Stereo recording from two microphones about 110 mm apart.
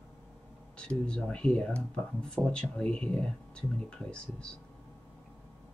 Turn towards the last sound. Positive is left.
turn(degrees=10)  # may be behind; listen again after turning